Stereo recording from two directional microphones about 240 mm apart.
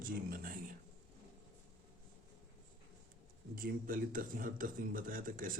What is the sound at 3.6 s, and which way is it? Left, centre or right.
Speech, right.